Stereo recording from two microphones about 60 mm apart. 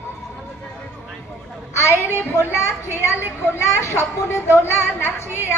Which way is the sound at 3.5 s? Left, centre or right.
Left.